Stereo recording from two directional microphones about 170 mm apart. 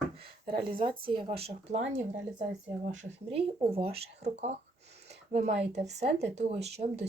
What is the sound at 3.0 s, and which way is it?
Speech, 40° right (ahead or behind).